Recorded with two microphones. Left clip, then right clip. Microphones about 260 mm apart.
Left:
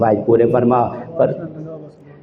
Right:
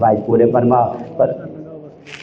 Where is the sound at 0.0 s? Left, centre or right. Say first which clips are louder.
Right 1 dB; left.